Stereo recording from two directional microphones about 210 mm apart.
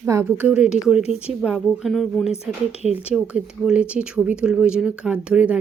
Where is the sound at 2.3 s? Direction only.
30° left (ahead or behind).